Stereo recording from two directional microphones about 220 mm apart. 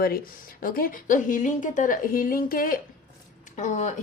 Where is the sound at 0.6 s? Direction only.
40° left (ahead or behind).